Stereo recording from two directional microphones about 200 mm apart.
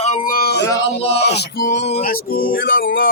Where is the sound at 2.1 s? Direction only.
45° left (ahead or behind).